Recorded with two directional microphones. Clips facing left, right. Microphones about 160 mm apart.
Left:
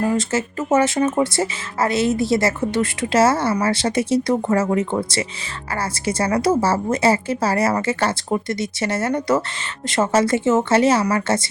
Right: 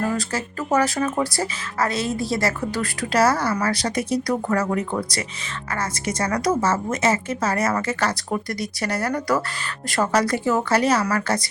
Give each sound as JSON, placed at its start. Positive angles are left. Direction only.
{"t": 0.0, "sound": "speech", "side_deg": 20}